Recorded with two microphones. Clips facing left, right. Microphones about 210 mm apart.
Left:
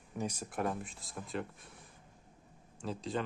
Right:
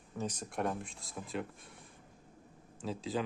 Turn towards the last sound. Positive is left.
turn(degrees=0)  # may be behind; listen again after turning